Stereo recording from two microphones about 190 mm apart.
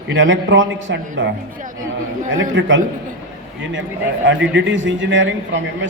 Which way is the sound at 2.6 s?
70° right (ahead or behind).